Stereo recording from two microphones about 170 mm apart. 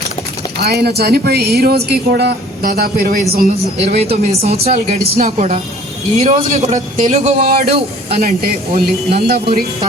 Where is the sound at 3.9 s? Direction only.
40° right (ahead or behind).